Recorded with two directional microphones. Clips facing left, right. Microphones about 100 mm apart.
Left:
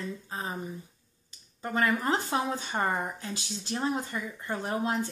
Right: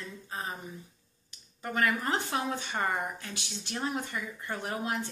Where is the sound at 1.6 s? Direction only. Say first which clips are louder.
Left 2 dB; 25° left (ahead or behind).